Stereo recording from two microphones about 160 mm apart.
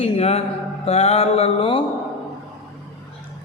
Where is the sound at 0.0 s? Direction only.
40° left (ahead or behind).